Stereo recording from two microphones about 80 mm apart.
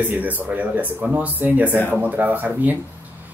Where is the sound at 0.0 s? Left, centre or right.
Right.